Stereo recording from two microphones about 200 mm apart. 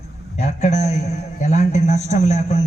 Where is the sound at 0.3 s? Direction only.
35° left (ahead or behind).